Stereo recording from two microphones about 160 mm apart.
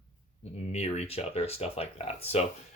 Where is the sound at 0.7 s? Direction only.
40° left (ahead or behind).